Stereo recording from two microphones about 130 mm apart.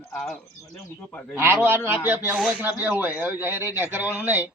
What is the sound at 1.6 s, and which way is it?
Speech, 15° right (ahead or behind).